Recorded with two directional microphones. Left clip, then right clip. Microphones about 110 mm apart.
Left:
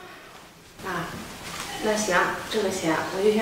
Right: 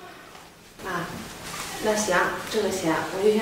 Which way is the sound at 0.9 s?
5° right (ahead or behind).